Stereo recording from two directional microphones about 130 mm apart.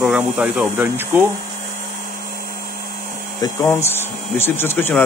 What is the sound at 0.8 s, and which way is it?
Speech, 15° right (ahead or behind).